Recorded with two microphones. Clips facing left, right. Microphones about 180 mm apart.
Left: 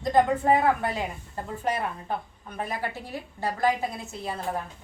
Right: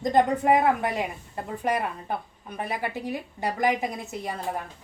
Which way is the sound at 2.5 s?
15° right (ahead or behind).